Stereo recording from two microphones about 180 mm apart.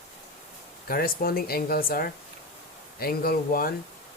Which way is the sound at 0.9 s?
55° left (ahead or behind).